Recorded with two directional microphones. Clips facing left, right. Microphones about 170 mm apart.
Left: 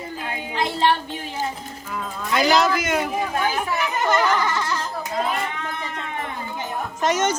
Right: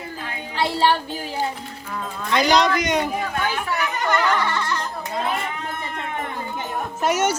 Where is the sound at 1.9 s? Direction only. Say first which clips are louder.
Right 1 dB; 5° left (ahead or behind).